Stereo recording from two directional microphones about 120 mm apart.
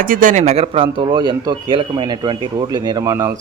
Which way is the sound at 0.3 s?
75° right (ahead or behind).